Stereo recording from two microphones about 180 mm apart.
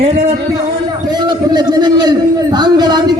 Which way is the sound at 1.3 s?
25° right (ahead or behind).